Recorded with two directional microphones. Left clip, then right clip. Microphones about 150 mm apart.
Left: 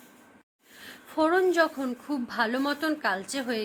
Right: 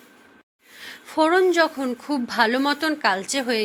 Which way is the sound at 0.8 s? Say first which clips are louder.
Right 6 dB; 25° right (ahead or behind).